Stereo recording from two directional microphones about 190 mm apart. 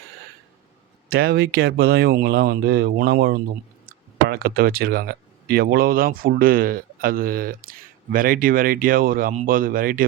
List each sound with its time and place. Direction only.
1.1 s speech: 55° right (ahead or behind)